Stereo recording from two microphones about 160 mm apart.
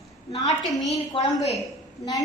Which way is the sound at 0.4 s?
Centre (ahead or behind).